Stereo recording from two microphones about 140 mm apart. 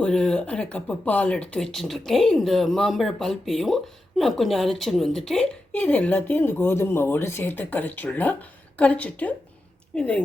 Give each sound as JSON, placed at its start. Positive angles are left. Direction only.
{"t": 0.0, "sound": "a woman's voice", "side_deg": 5}